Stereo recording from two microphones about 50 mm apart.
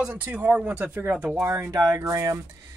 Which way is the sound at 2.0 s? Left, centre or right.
Right.